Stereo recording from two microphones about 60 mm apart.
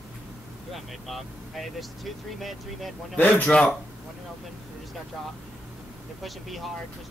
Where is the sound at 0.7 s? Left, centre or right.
Centre.